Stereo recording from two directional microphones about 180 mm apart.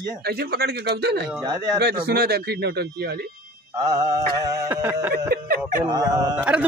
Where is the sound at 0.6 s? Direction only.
65° right (ahead or behind).